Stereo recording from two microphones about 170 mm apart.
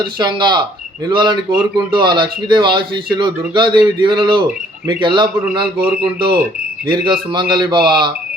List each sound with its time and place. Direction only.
0.0 s speech: 25° right (ahead or behind)
6.8 s speech: 30° right (ahead or behind)